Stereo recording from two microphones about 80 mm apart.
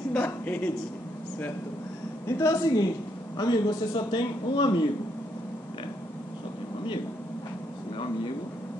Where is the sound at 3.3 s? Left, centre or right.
Left.